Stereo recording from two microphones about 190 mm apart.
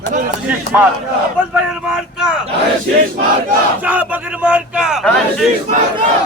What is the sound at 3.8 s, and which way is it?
Speech, 10° right (ahead or behind).